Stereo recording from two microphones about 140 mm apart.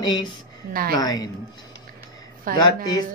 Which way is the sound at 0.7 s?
90° right.